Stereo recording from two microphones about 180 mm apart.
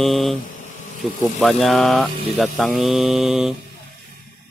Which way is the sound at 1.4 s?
Centre (ahead or behind).